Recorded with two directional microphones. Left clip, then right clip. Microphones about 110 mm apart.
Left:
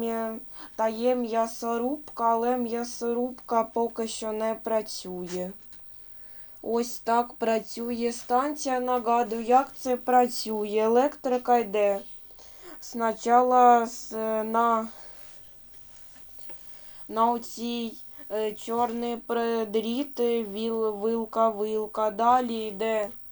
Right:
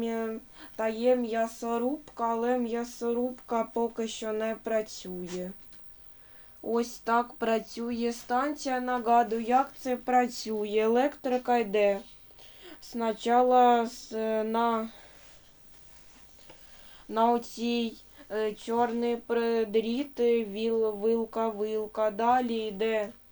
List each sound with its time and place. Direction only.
0.0 s speech: 20° left (ahead or behind)
5.2 s speech: 35° left (ahead or behind)
6.7 s speech: 20° left (ahead or behind)
11.7 s speech: 15° right (ahead or behind)
12.4 s speech: 10° left (ahead or behind)
14.6 s speech: 20° left (ahead or behind)
17.1 s speech: 5° left (ahead or behind)
18.9 s speech: 45° left (ahead or behind)
22.8 s speech: 20° left (ahead or behind)